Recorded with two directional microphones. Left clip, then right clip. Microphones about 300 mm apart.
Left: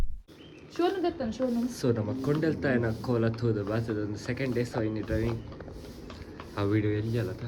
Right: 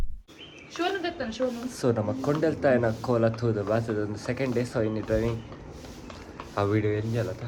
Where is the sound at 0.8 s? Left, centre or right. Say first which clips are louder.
Left 1 dB; left.